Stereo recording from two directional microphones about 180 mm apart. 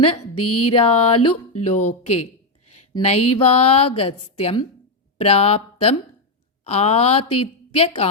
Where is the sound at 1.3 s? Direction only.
35° left (ahead or behind).